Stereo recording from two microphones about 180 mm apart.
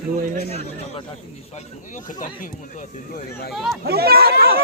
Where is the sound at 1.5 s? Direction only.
45° left (ahead or behind).